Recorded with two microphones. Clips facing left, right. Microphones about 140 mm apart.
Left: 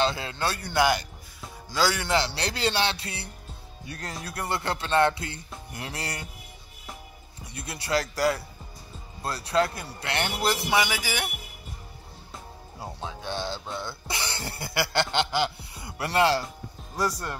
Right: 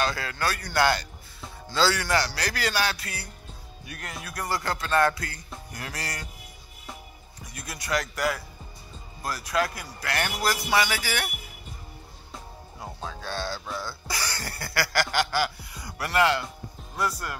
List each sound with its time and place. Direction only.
0.0 s speech: 25° left (ahead or behind)
7.4 s speech: 30° left (ahead or behind)
13.0 s speech: 20° left (ahead or behind)